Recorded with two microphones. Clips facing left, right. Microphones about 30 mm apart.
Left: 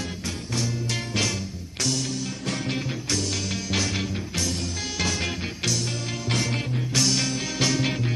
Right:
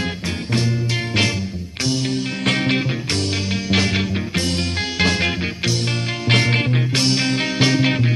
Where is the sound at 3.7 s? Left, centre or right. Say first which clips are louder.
Right 8 dB; right.